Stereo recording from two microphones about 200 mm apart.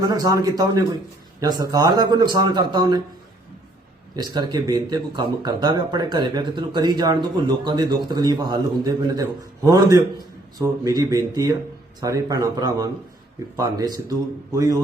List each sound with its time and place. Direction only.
0.0 s speech: 20° right (ahead or behind)
4.1 s a man's voice: 20° right (ahead or behind)